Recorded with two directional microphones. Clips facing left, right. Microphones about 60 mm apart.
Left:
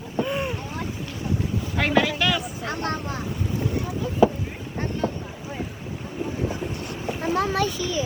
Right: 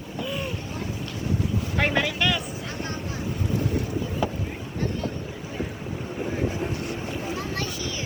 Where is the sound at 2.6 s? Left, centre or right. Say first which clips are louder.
Left 5 dB; left.